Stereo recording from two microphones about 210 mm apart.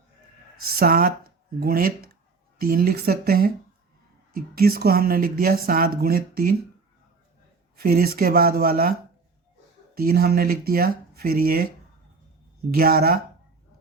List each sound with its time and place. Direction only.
0.7 s speech: 45° right (ahead or behind)
7.8 s speech: 45° right (ahead or behind)
12.7 s speech: 45° right (ahead or behind)